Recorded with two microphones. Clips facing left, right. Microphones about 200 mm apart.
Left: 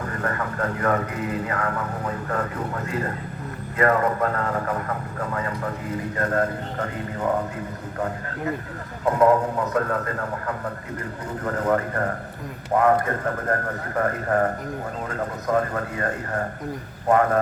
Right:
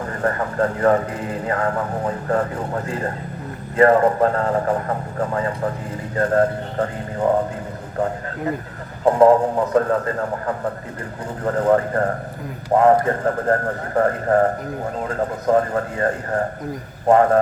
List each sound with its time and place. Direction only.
0.2 s a man's voice: 30° right (ahead or behind)
9.0 s a man's voice: 30° right (ahead or behind)